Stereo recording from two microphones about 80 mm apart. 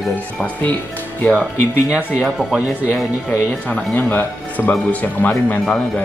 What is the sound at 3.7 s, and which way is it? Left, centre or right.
Speech, left.